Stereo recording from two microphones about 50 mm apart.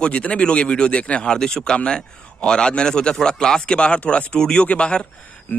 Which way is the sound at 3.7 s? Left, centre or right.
Left.